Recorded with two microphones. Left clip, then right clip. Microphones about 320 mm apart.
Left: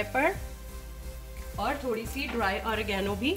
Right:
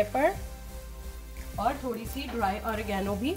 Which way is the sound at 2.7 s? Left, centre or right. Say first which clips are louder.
Left 1 dB; right.